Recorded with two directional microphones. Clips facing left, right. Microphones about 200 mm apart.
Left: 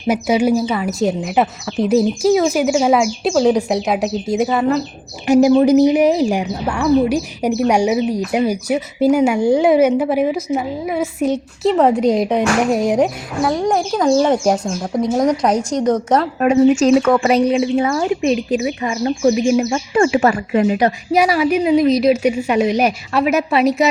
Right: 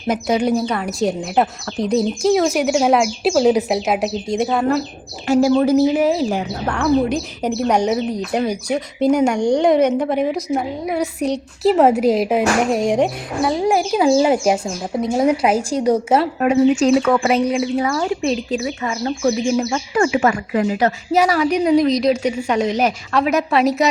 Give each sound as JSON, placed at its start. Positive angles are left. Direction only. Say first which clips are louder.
{"t": 0.1, "sound": "a woman's voice", "louder": "left 3 dB", "side_deg": 5}
{"t": 5.2, "sound": "a woman's voice", "louder": "left 3 dB", "side_deg": 15}
{"t": 16.4, "sound": "speech", "louder": "left 4 dB", "side_deg": 45}
{"t": 17.5, "sound": "speech", "louder": "left 3 dB", "side_deg": 25}
{"t": 20.6, "sound": "a woman's voice", "louder": "left 3 dB", "side_deg": 20}